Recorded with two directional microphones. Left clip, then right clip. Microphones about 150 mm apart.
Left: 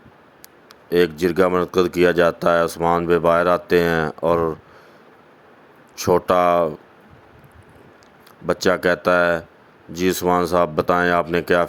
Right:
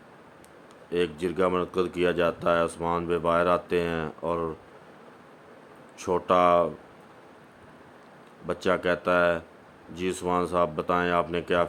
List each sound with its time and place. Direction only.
0.9 s speech: 40° left (ahead or behind)
6.0 s speech: 40° left (ahead or behind)
8.4 s speech: 40° left (ahead or behind)